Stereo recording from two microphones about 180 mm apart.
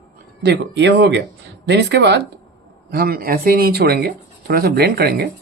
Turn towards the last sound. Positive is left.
turn(degrees=-60)  # may be behind; listen again after turning